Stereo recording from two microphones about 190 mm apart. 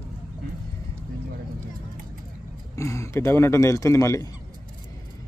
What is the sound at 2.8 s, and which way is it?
Speech, 15° left (ahead or behind).